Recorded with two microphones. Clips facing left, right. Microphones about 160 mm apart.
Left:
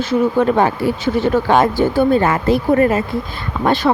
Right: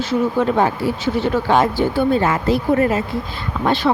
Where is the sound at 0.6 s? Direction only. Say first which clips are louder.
Left 2 dB; 55° left (ahead or behind).